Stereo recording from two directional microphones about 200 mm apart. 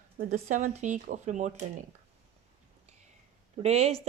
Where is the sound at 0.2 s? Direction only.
40° right (ahead or behind).